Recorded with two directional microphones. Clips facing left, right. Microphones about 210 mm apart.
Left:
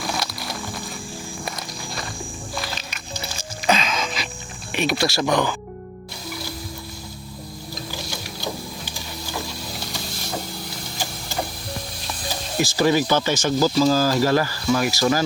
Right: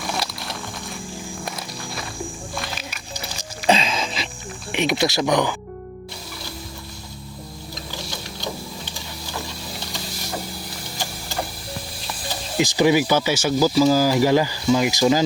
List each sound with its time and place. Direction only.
0.3 s music: centre (ahead or behind)
1.5 s walk: centre (ahead or behind)
2.7 s music: 5° right (ahead or behind)
3.7 s music: 30° right (ahead or behind)
4.7 s speech: 20° right (ahead or behind)
12.5 s speech: 15° right (ahead or behind)